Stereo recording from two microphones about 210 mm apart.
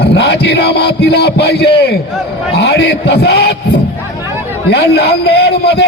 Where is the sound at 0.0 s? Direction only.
55° left (ahead or behind).